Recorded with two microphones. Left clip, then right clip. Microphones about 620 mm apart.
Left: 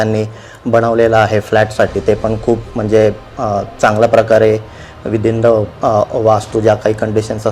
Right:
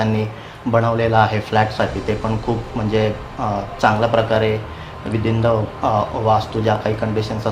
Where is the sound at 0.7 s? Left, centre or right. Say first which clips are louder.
Left 6 dB; left.